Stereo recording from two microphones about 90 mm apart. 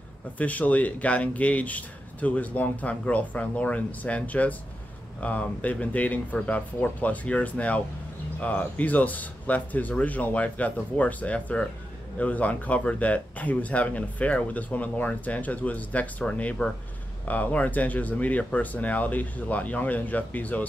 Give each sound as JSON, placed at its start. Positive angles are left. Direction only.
{"t": 0.4, "sound": "speech", "side_deg": 15}